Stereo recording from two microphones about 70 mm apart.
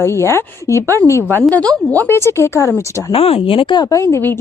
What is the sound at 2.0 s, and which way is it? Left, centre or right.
Speech, left.